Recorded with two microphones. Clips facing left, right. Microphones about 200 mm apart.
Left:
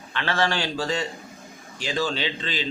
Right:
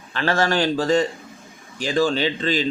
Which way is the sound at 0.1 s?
40° right (ahead or behind).